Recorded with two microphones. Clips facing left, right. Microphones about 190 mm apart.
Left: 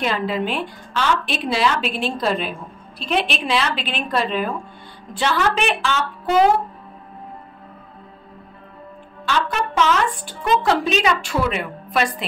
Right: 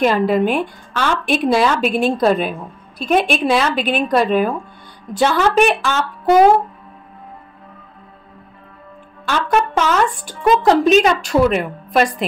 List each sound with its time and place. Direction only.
0.0 s speech: 50° right (ahead or behind)
9.2 s speech: 50° right (ahead or behind)